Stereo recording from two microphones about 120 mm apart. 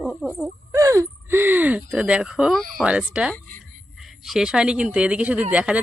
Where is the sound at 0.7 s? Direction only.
25° right (ahead or behind).